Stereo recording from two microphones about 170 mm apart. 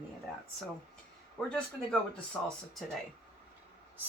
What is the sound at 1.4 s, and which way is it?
Speech, 5° left (ahead or behind).